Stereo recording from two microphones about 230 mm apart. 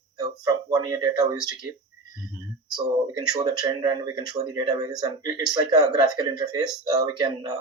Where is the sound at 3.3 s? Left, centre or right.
Centre.